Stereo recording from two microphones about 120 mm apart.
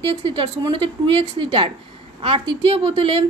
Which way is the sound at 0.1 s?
45° right (ahead or behind).